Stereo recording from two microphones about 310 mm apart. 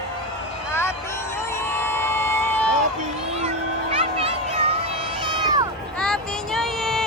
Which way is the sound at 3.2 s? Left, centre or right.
Centre.